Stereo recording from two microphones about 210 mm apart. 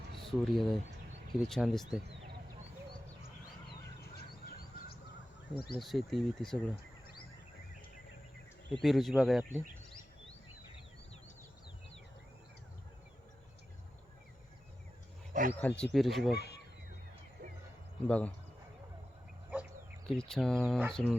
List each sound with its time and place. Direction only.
0.2 s speech: centre (ahead or behind)
4.1 s a sound: 50° left (ahead or behind)
5.5 s speech: 25° left (ahead or behind)
5.8 s speech: centre (ahead or behind)
8.7 s speech: centre (ahead or behind)
15.3 s wild animals: 40° right (ahead or behind)
15.6 s speech: 5° left (ahead or behind)
18.0 s speech: 5° left (ahead or behind)
20.1 s speech: 5° left (ahead or behind)